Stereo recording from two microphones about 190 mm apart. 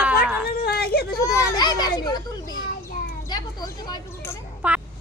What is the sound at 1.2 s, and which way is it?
Children playing, 15° left (ahead or behind).